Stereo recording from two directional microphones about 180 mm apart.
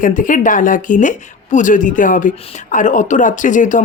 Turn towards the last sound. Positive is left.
turn(degrees=45)  # may be behind; listen again after turning